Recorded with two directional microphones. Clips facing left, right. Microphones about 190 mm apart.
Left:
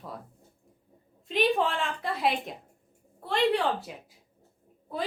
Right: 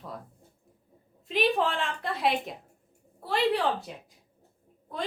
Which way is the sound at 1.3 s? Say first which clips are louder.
Even; centre (ahead or behind).